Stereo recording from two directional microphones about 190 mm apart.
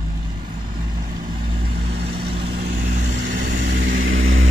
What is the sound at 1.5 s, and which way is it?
Vehicle, 55° right (ahead or behind).